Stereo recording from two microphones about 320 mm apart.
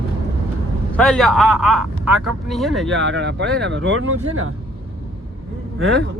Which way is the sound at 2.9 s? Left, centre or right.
Right.